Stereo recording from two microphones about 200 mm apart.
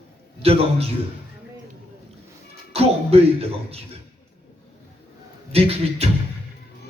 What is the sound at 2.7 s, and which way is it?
Speech, 30° right (ahead or behind).